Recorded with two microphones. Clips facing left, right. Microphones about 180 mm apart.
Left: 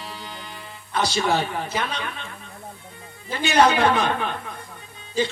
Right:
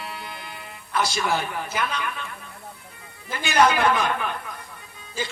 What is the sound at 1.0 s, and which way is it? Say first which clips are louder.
A man's voice: left 3 dB; 30° left (ahead or behind).